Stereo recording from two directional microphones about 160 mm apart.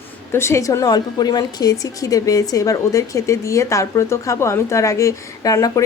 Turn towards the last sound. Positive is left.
turn(degrees=20)  # may be behind; listen again after turning